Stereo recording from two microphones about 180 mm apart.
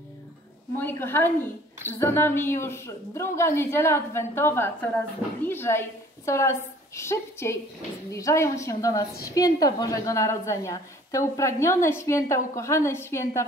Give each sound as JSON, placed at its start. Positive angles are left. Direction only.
{"t": 0.7, "sound": "a woman's voice", "side_deg": 10}